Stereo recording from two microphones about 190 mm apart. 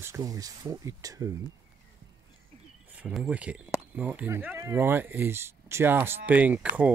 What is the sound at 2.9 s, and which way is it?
Speech, 5° right (ahead or behind).